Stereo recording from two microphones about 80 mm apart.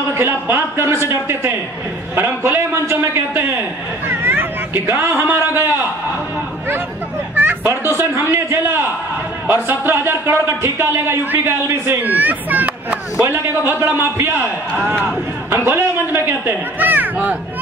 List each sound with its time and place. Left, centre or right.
0.1 s a man's voice: right
7.3 s children playing: right
8.0 s speech: right
12.0 s a man's voice: right